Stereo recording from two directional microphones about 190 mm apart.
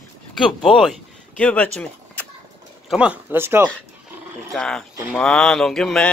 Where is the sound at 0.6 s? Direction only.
5° left (ahead or behind).